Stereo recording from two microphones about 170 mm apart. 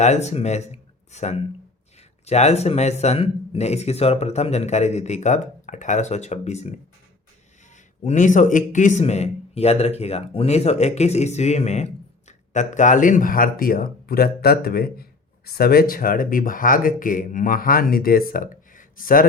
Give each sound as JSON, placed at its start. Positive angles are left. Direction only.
{"t": 0.0, "sound": "speech", "side_deg": 40}
{"t": 8.0, "sound": "speech", "side_deg": 50}